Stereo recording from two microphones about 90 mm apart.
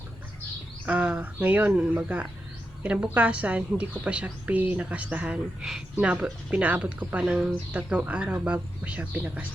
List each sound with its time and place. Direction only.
0.9 s speech: 15° right (ahead or behind)
5.6 s speech: 5° right (ahead or behind)
6.5 s speech: 15° right (ahead or behind)